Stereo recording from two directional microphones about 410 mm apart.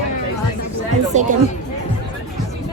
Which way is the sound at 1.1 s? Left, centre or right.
Centre.